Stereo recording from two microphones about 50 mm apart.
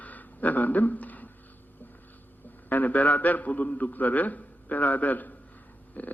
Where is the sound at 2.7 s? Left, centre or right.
Left.